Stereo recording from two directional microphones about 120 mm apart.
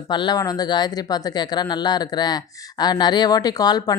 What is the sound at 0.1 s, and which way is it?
Speech, 35° left (ahead or behind).